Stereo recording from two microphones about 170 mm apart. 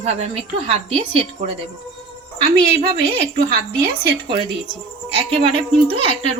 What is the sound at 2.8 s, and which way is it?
Speech, 75° right (ahead or behind).